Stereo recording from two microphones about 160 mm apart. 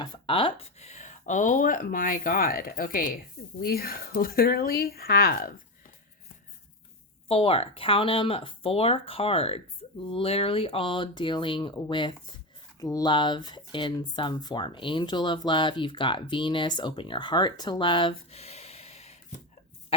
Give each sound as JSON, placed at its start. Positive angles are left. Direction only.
{"t": 0.0, "sound": "speech", "side_deg": 30}
{"t": 7.3, "sound": "speech", "side_deg": 40}